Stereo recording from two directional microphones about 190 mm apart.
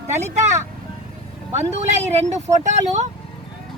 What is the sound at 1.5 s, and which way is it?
Speech, 35° right (ahead or behind).